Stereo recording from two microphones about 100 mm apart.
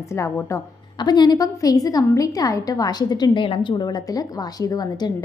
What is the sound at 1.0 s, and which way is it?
A woman's voice, 45° left (ahead or behind).